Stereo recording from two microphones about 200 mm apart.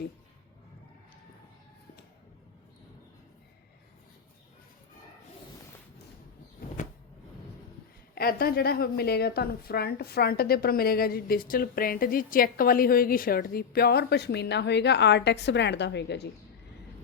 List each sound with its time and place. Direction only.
8.1 s a woman's voice: 50° left (ahead or behind)